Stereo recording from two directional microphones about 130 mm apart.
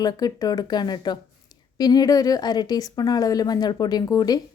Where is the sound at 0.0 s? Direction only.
30° left (ahead or behind).